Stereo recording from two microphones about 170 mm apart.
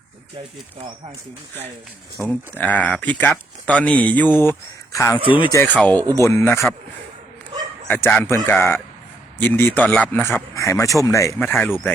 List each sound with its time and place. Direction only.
2.1 s speech: 5° left (ahead or behind)
7.9 s speech: 10° left (ahead or behind)